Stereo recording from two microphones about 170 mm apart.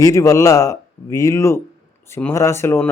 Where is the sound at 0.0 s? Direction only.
20° left (ahead or behind).